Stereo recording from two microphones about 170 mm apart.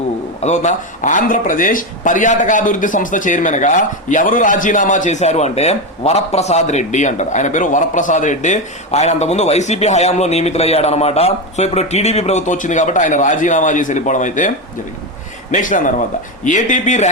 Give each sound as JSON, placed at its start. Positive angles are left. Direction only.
{"t": 0.3, "sound": "speech", "side_deg": 45}
{"t": 15.5, "sound": "speech", "side_deg": 50}